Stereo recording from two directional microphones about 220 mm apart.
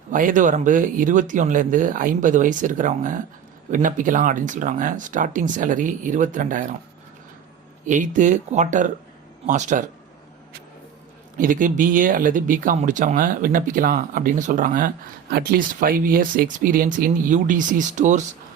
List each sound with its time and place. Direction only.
0.1 s speech: 35° right (ahead or behind)
7.9 s speech: 35° right (ahead or behind)
11.3 s speech: 40° right (ahead or behind)